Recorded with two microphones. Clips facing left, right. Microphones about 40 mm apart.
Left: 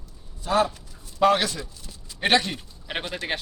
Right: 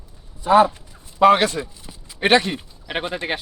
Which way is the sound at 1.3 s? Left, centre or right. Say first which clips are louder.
Right 6 dB; right.